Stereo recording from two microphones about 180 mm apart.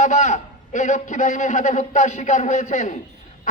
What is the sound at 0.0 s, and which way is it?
A man's voice, 45° left (ahead or behind).